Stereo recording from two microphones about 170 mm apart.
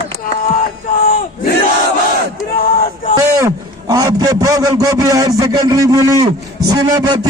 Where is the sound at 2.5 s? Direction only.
60° left (ahead or behind).